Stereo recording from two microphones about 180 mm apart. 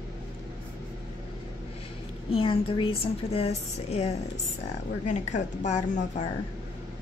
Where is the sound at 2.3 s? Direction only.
30° left (ahead or behind).